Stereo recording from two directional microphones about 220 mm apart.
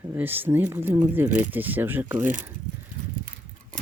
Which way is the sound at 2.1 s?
35° right (ahead or behind).